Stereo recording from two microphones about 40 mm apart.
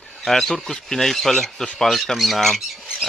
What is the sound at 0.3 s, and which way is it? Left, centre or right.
Speech, centre.